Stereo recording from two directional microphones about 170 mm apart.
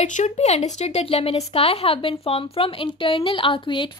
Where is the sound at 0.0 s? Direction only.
45° left (ahead or behind).